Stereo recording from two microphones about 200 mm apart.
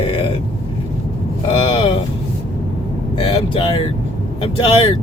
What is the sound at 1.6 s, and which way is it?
Speech, 25° left (ahead or behind).